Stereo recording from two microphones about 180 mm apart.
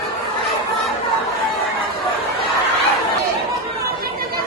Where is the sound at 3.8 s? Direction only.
55° right (ahead or behind).